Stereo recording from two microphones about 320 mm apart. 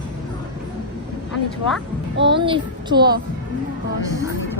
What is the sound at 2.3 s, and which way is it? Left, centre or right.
Speech, centre.